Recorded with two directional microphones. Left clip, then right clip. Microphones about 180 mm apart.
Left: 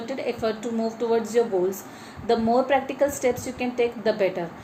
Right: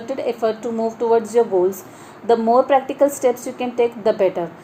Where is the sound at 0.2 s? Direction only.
25° right (ahead or behind).